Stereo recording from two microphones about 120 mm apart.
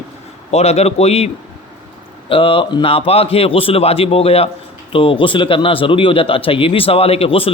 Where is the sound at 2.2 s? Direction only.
50° left (ahead or behind).